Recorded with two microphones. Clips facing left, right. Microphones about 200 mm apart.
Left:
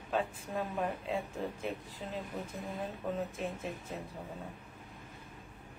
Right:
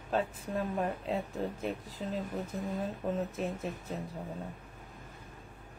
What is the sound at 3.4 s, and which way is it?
Speech, 40° right (ahead or behind).